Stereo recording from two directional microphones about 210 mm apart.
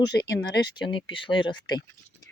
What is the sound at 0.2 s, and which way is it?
Speech, 20° left (ahead or behind).